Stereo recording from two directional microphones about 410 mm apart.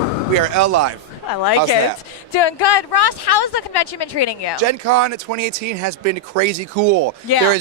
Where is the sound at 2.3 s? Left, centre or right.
Left.